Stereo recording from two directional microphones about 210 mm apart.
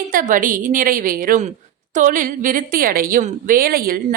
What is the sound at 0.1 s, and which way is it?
A woman's voice, 40° right (ahead or behind).